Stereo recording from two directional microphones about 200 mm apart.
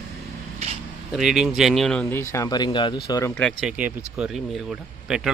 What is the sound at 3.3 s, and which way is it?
Speech, 5° left (ahead or behind).